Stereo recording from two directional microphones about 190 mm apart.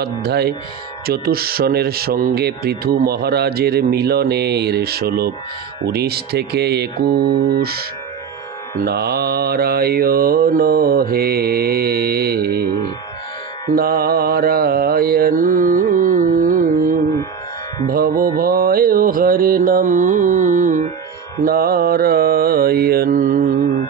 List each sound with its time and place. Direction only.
0.0 s speech: 55° right (ahead or behind)
8.8 s mantra: 55° right (ahead or behind)
13.7 s mantra: 50° right (ahead or behind)
15.7 s music: 45° right (ahead or behind)
21.4 s mantra: 50° right (ahead or behind)
23.1 s music: 45° right (ahead or behind)